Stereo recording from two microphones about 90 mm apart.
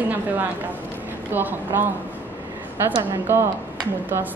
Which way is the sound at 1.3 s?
20° right (ahead or behind).